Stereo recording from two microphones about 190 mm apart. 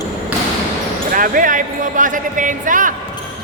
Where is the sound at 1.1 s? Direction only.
45° right (ahead or behind).